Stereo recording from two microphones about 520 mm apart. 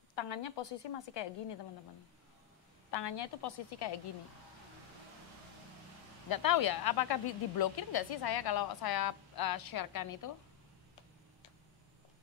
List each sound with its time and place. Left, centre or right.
0.1 s a woman's voice: left
2.9 s speech: left
6.4 s speech: left